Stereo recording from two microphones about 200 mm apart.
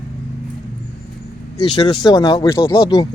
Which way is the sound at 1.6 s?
25° left (ahead or behind).